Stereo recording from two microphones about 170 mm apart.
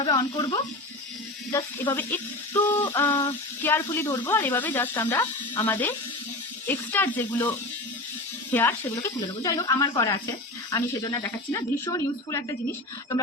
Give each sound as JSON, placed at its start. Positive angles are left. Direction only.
{"t": 0.0, "sound": "speech", "side_deg": 25}
{"t": 1.5, "sound": "speech", "side_deg": 15}